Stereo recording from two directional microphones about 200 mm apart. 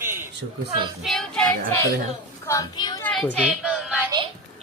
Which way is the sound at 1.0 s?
5° left (ahead or behind).